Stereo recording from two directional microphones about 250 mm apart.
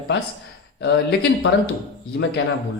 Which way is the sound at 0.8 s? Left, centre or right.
Left.